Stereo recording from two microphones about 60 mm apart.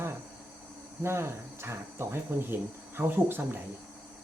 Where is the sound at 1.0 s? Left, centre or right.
Right.